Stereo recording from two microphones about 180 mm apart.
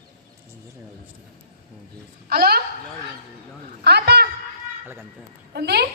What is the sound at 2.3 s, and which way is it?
Speech, 60° right (ahead or behind).